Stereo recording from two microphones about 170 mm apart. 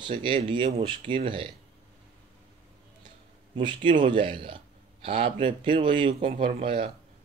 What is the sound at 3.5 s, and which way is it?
A man's voice, 30° right (ahead or behind).